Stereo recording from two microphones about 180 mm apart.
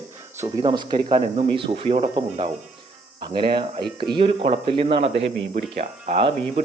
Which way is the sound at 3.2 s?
30° right (ahead or behind).